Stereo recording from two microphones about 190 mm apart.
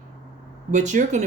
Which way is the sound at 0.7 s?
40° right (ahead or behind).